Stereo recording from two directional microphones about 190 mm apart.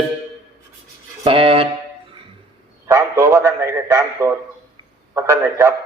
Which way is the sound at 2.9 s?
15° right (ahead or behind).